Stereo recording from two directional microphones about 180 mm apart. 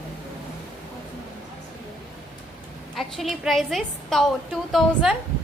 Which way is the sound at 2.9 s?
Centre (ahead or behind).